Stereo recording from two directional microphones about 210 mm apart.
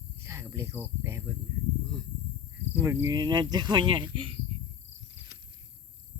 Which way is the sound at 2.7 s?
10° right (ahead or behind).